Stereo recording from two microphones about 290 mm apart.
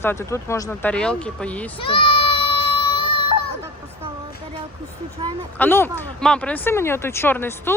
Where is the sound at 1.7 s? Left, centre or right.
Centre.